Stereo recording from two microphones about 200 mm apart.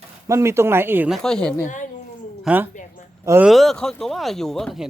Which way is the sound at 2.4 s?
10° right (ahead or behind).